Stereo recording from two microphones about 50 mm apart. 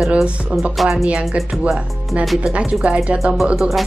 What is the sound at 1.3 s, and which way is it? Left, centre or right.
Speech, right.